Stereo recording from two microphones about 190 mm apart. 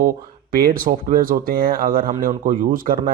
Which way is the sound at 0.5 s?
50° right (ahead or behind).